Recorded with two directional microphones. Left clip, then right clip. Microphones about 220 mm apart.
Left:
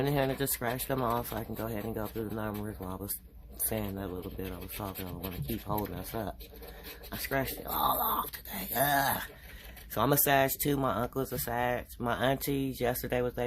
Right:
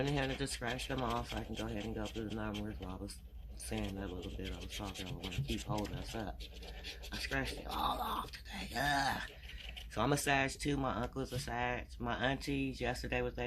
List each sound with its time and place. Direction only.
0.0 s speech: 50° left (ahead or behind)
3.8 s speech: 45° left (ahead or behind)